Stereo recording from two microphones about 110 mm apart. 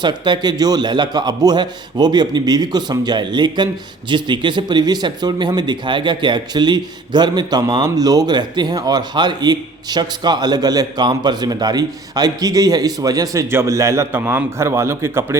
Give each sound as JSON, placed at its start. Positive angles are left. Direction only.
{"t": 0.0, "sound": "a man's voice", "side_deg": -40}